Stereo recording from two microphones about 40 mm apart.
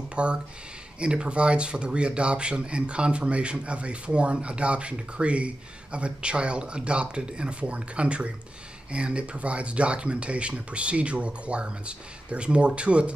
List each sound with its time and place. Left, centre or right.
0.1 s speech: right